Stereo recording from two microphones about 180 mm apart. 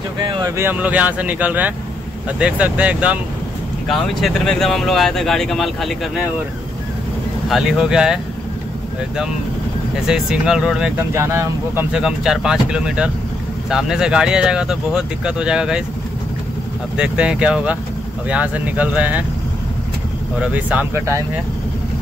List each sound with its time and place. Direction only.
0.2 s speech: 25° right (ahead or behind)
0.7 s speech: 10° right (ahead or behind)
7.4 s speech: centre (ahead or behind)
10.0 s speech: 5° right (ahead or behind)
11.1 s speech: 15° right (ahead or behind)
16.9 s speech: 5° right (ahead or behind)
20.3 s speech: 5° right (ahead or behind)